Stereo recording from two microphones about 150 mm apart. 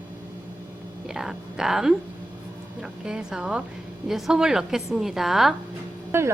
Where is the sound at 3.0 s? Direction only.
5° right (ahead or behind).